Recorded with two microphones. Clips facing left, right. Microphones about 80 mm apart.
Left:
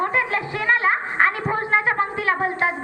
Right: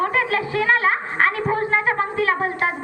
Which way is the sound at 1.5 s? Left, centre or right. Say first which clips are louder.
Right 1 dB; left.